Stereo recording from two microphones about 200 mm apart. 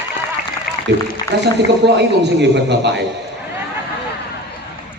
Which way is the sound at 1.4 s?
60° right (ahead or behind).